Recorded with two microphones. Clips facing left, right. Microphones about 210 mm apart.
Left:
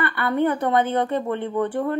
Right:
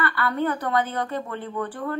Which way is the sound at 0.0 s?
20° left (ahead or behind).